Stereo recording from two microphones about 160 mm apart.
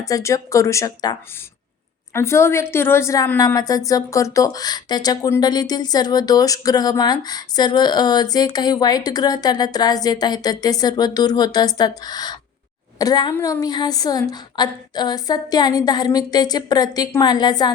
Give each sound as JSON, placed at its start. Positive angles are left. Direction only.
{"t": 0.0, "sound": "a woman's voice", "side_deg": 20}
{"t": 2.1, "sound": "a woman's voice", "side_deg": 15}